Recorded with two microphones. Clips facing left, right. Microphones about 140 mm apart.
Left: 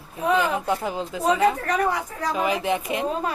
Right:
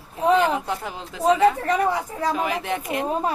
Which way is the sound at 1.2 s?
25° right (ahead or behind).